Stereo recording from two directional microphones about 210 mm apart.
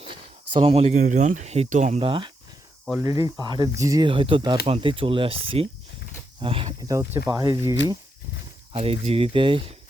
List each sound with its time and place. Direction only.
0.6 s speech: 30° right (ahead or behind)
2.0 s speech: 25° right (ahead or behind)
8.7 s speech: 25° right (ahead or behind)